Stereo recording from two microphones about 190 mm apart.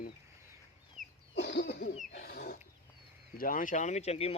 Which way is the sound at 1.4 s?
65° left (ahead or behind).